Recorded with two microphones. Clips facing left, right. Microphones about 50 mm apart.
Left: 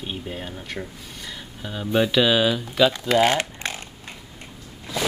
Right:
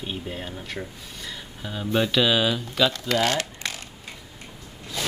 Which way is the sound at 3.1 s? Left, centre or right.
Left.